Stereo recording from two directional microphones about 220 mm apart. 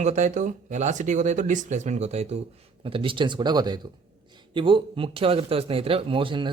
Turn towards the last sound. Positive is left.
turn(degrees=-20)  # may be behind; listen again after turning